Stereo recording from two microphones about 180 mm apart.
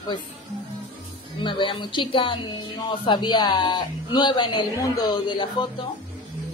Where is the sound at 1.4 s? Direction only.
30° left (ahead or behind).